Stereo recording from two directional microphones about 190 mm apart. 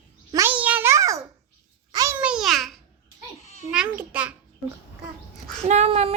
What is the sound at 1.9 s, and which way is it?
Babbling, 15° right (ahead or behind).